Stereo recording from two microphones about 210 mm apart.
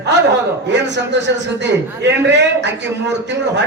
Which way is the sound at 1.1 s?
55° right (ahead or behind).